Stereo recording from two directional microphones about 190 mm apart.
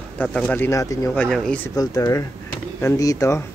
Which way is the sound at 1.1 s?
5° left (ahead or behind).